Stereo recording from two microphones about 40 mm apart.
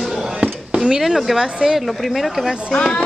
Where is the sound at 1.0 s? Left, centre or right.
Centre.